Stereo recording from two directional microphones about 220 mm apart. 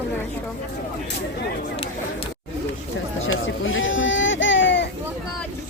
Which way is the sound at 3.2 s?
60° left (ahead or behind).